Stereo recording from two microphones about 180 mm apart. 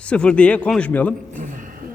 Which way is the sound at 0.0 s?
5° left (ahead or behind).